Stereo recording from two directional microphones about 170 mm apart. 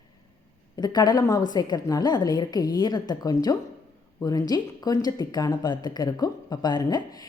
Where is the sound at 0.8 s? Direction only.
25° left (ahead or behind).